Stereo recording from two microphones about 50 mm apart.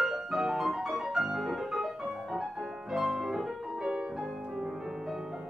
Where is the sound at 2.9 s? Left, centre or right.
Centre.